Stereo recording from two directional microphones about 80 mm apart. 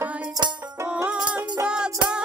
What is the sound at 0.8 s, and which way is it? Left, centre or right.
Music, centre.